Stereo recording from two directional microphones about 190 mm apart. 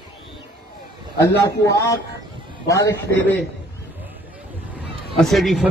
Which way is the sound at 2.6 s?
15° left (ahead or behind).